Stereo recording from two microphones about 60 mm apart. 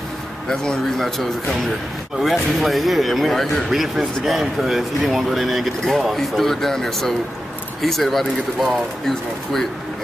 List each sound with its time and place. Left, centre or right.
0.5 s speech: centre